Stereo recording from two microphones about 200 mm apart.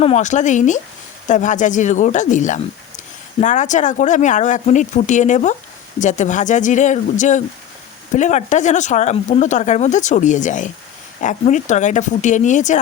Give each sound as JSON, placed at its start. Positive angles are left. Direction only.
{"t": 0.0, "sound": "speech", "side_deg": 35}